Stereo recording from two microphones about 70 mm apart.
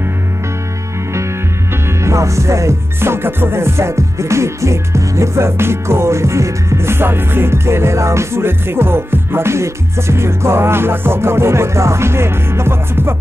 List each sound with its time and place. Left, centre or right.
2.0 s music: right